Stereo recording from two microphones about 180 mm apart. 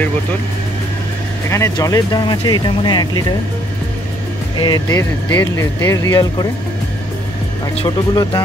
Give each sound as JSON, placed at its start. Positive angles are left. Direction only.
{"t": 1.5, "sound": "speech", "side_deg": 15}
{"t": 4.6, "sound": "speech", "side_deg": 25}
{"t": 7.7, "sound": "speech", "side_deg": 25}